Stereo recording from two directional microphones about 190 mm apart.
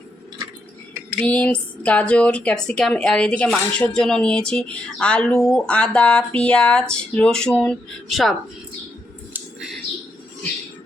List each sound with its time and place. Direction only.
1.2 s speech: 5° left (ahead or behind)